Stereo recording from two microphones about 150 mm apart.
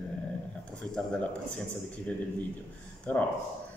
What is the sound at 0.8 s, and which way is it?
Speech, 5° left (ahead or behind).